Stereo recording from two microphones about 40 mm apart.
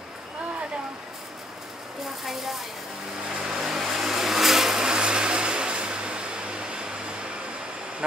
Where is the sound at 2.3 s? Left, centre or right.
Centre.